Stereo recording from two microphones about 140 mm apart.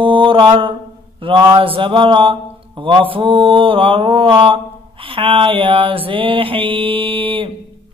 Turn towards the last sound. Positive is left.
turn(degrees=-40)  # may be behind; listen again after turning